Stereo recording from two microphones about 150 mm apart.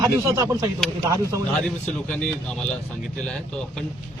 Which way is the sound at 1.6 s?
5° left (ahead or behind).